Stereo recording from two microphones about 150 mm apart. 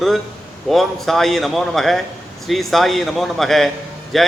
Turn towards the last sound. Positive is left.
turn(degrees=0)  # may be behind; listen again after turning